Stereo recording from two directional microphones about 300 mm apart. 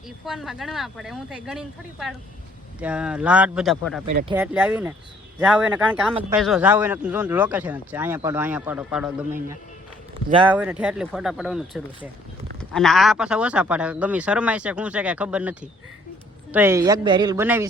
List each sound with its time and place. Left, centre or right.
0.3 s speech: centre
10.2 s speech: centre
10.5 s speech: centre